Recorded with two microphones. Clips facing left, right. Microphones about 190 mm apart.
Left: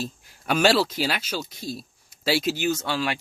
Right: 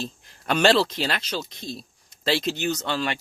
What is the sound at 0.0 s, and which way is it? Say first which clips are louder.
Speech: left 1 dB; 5° left (ahead or behind).